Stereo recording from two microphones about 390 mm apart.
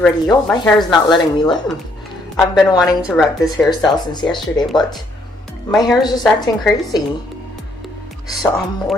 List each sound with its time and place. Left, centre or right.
0.0 s a woman's voice: centre
3.8 s speech: centre
5.7 s a woman's voice: centre
8.3 s speech: centre